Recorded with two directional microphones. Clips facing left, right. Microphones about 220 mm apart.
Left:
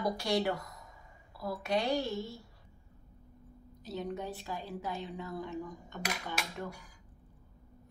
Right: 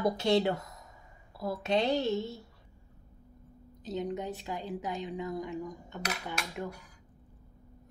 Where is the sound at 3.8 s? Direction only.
20° right (ahead or behind).